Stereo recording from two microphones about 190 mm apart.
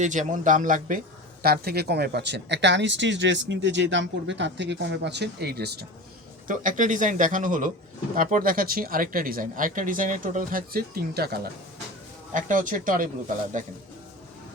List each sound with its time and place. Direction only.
0.0 s speech: 40° right (ahead or behind); by 5.8 s 55° right (ahead or behind)
6.5 s speech: 45° right (ahead or behind)
12.3 s speech: 45° right (ahead or behind)